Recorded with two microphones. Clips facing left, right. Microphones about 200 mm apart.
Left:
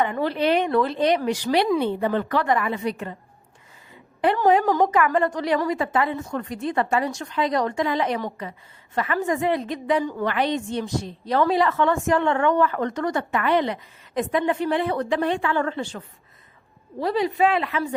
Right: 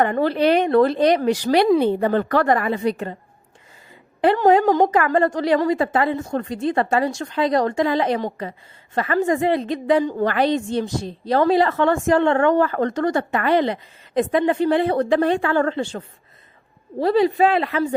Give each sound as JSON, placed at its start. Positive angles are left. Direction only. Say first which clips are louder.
{"t": 0.0, "sound": "a woman's voice", "louder": "right 4 dB", "side_deg": -40}
{"t": 4.2, "sound": "a woman's voice", "louder": "right 4 dB", "side_deg": -30}
{"t": 10.2, "sound": "a woman's voice", "louder": "right 4 dB", "side_deg": -35}
{"t": 17.0, "sound": "a woman's voice", "louder": "right 5 dB", "side_deg": -30}